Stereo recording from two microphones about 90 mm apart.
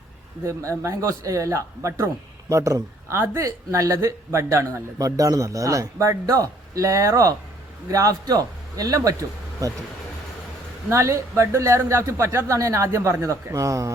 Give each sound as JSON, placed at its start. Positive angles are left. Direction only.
{"t": 0.4, "sound": "speech", "side_deg": -35}
{"t": 10.8, "sound": "speech", "side_deg": -30}